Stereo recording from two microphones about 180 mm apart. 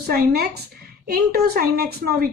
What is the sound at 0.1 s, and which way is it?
Speech, 60° right (ahead or behind).